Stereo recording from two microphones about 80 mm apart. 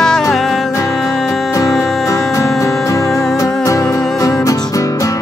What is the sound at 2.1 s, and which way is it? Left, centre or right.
Music, left.